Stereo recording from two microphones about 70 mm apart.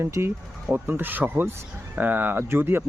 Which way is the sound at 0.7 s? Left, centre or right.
Right.